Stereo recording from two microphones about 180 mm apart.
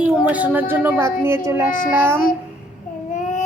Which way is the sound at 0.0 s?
10° right (ahead or behind).